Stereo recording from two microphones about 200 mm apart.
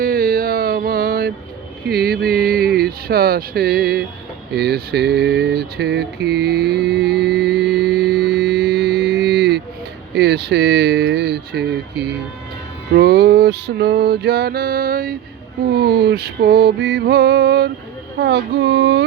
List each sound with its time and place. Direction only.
0.0 s mantra: 45° right (ahead or behind)
1.9 s music: 50° right (ahead or behind)
4.5 s a sound: 50° right (ahead or behind)
10.2 s speech: 55° right (ahead or behind)
12.9 s music: 55° right (ahead or behind)
18.2 s speech: 55° right (ahead or behind)